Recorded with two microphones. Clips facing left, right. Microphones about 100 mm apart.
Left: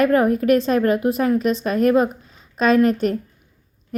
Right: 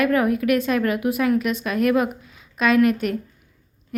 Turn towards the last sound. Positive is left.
turn(degrees=35)  # may be behind; listen again after turning